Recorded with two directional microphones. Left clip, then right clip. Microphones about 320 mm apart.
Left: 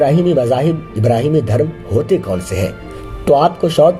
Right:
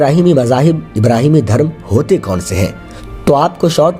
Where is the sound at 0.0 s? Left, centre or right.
Right.